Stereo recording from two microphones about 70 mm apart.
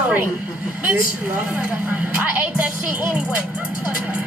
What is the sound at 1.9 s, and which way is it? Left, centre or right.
Speech, right.